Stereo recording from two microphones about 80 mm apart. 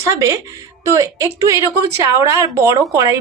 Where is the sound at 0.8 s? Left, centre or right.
Right.